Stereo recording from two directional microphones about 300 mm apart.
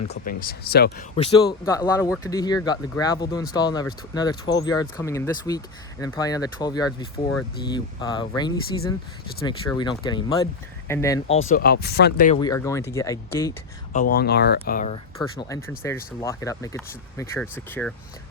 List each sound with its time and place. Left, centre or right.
0.0 s speech: left
1.6 s speech: centre
11.4 s speech: left
12.4 s speech: centre
13.9 s speech: left
15.2 s speech: centre